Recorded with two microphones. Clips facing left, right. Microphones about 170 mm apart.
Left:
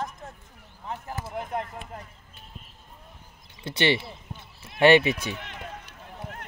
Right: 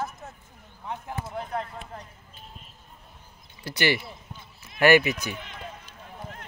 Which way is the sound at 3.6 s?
25° left (ahead or behind).